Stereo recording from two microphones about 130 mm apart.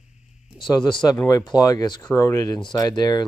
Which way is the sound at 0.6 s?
35° left (ahead or behind).